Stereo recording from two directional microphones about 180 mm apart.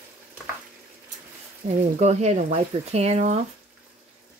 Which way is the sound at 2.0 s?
40° right (ahead or behind).